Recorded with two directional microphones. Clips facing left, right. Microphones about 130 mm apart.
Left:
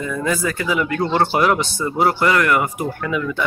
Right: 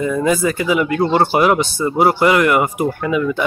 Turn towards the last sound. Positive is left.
turn(degrees=-15)  # may be behind; listen again after turning